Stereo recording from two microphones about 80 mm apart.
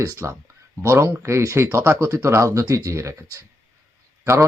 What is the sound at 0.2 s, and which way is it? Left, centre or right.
Speech, right.